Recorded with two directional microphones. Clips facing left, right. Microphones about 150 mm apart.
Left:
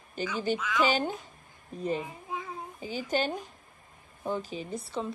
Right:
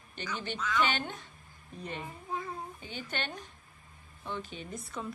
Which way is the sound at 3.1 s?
40° left (ahead or behind).